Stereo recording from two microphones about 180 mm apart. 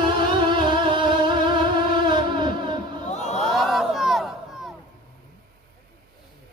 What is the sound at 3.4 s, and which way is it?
Crowd, centre (ahead or behind).